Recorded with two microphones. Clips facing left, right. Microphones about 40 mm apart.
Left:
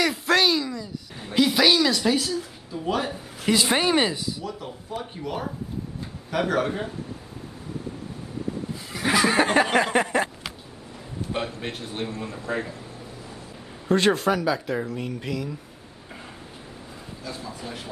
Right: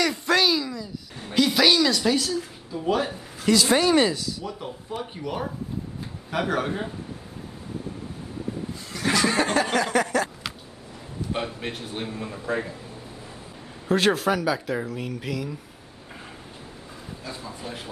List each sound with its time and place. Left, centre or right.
0.0 s speech: centre
3.4 s speech: left
4.5 s speech: centre
8.9 s a sound: centre
11.3 s speech: centre
13.8 s speech: centre
17.2 s a man's voice: centre